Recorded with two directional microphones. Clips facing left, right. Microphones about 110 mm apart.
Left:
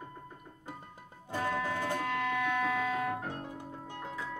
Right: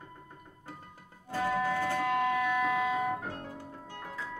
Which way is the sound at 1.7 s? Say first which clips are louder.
Right 3 dB; 15° left (ahead or behind).